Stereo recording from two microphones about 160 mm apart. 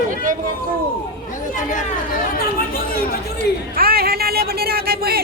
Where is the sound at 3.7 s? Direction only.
70° right (ahead or behind).